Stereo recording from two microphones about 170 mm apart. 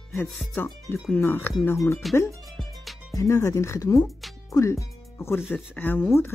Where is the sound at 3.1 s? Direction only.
15° left (ahead or behind).